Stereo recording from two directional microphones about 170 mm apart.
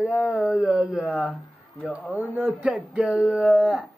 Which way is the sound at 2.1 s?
10° right (ahead or behind).